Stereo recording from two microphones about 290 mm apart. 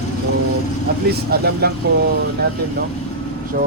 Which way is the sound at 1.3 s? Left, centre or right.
Right.